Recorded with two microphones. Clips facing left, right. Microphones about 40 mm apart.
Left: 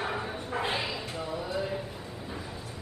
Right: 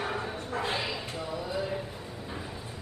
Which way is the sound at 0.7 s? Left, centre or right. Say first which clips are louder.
Even; centre.